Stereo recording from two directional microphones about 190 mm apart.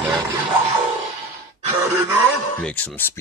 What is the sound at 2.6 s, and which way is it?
Speech, 10° left (ahead or behind).